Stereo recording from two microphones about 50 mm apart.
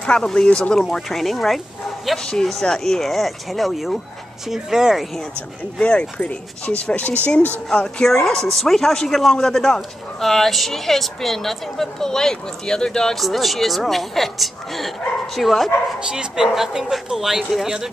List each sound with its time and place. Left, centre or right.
0.0 s speech: centre
0.7 s speech: centre
5.8 s speech: left
13.2 s speech: centre
16.1 s speech: centre